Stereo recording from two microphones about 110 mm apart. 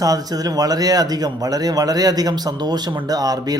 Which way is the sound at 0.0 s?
35° right (ahead or behind).